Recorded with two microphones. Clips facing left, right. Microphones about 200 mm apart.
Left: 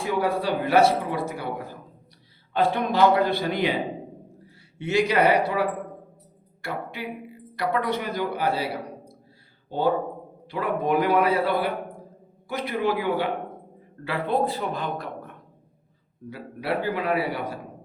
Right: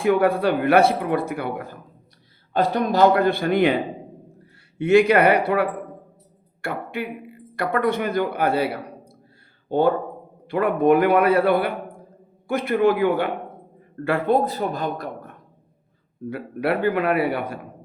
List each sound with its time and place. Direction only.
0.0 s speech: 55° right (ahead or behind)
2.5 s speech: 40° right (ahead or behind)
4.8 s a man's voice: 55° right (ahead or behind)
16.3 s speech: 55° right (ahead or behind)